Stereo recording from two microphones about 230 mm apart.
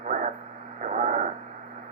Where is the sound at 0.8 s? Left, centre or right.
Right.